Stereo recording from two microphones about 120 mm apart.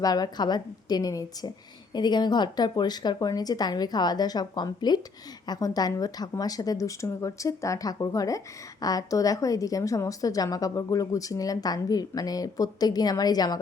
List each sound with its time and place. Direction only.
0.0 s a woman's voice: 35° left (ahead or behind)